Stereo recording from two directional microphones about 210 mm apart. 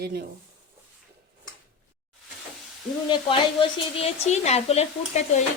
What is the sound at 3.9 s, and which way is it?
Stir, 30° left (ahead or behind).